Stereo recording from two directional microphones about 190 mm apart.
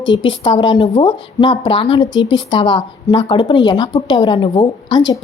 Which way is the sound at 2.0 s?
80° left.